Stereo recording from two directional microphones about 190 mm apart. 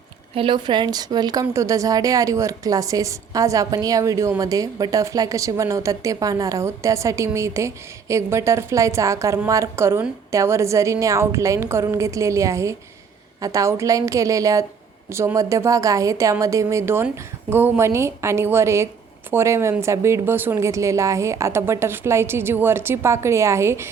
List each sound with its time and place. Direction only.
0.3 s a woman's voice: 25° right (ahead or behind)